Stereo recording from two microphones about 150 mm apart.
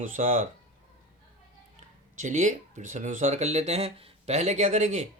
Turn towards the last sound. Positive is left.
turn(degrees=-50)  # may be behind; listen again after turning